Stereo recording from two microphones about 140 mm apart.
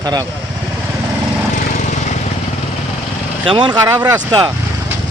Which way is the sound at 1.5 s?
60° left (ahead or behind).